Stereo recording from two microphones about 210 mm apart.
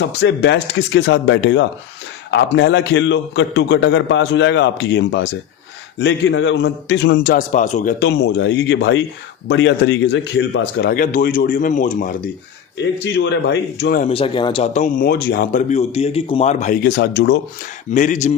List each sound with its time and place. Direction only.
0.0 s a man's voice: 55° left (ahead or behind); by 7.9 s 35° left (ahead or behind)
7.9 s a man's voice: 55° left (ahead or behind)
10.9 s speech: 40° left (ahead or behind)
13.1 s speech: 55° left (ahead or behind)
14.0 s speech: 25° left (ahead or behind); by 15.6 s 45° left (ahead or behind)
15.7 s a man's voice: 30° left (ahead or behind)
16.8 s speech: 50° left (ahead or behind)
17.9 s speech: 35° left (ahead or behind)